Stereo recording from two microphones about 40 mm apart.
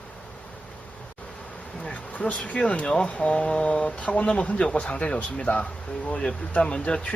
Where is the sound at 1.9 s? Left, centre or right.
Left.